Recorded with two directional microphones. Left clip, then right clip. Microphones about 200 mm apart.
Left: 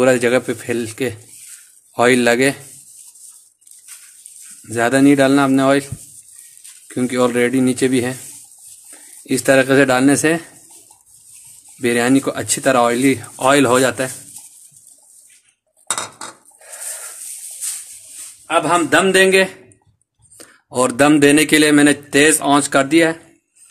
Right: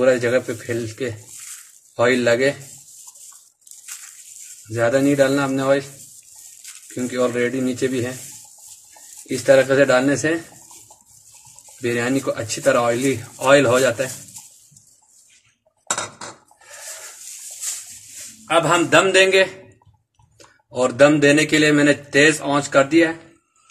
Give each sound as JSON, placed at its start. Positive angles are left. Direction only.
{"t": 0.0, "sound": "speech", "side_deg": 50}
{"t": 4.6, "sound": "speech", "side_deg": 50}
{"t": 6.9, "sound": "speech", "side_deg": 55}
{"t": 9.3, "sound": "speech", "side_deg": 50}
{"t": 11.8, "sound": "speech", "side_deg": 50}
{"t": 18.5, "sound": "a man's voice", "side_deg": 20}
{"t": 20.3, "sound": "speech", "side_deg": 55}